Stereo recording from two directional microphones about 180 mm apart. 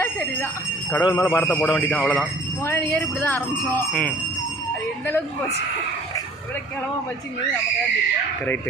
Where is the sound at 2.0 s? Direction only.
Centre (ahead or behind).